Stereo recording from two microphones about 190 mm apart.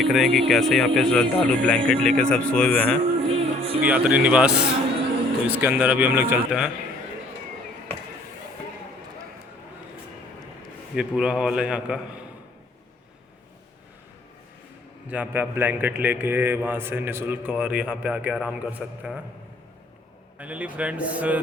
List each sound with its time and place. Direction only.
0.0 s speech: centre (ahead or behind)
3.2 s music: 30° right (ahead or behind)
3.8 s a man's voice: 10° right (ahead or behind)
10.9 s speech: 5° right (ahead or behind)
15.0 s a man's voice: 10° right (ahead or behind)
20.4 s a man's voice: 5° right (ahead or behind)